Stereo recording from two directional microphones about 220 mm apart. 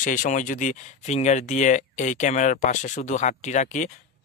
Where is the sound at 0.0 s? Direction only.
35° left (ahead or behind).